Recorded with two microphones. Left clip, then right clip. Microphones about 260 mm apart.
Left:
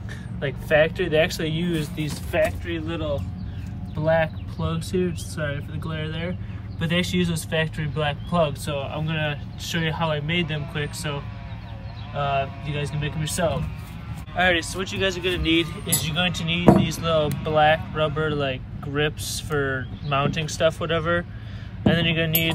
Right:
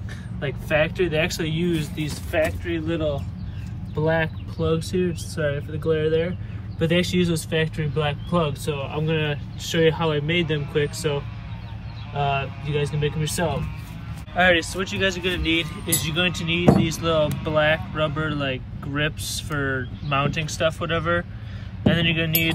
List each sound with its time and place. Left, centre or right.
0.4 s speech: centre
12.2 s speech: centre